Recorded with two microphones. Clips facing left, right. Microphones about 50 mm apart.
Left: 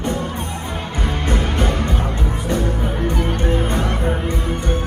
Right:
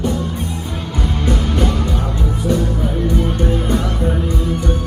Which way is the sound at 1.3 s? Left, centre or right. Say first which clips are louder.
Right 2 dB; left.